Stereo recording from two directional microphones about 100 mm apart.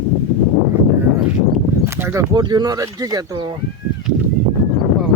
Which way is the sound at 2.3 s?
45° right (ahead or behind).